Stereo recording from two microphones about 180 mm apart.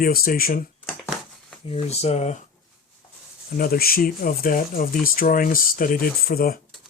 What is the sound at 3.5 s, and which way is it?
Speech, 55° left (ahead or behind).